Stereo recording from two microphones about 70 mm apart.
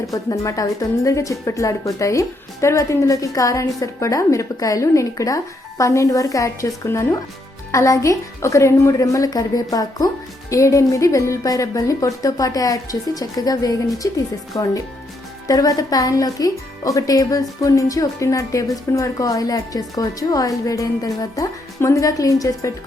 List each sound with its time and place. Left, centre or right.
0.1 s speech: left
10.5 s speech: left
21.8 s speech: left